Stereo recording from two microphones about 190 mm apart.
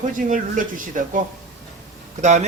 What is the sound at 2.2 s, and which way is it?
Speech, 40° right (ahead or behind).